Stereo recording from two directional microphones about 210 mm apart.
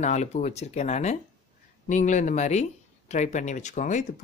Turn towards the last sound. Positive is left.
turn(degrees=35)  # may be behind; listen again after turning